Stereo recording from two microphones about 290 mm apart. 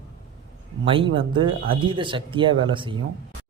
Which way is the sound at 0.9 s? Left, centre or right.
Centre.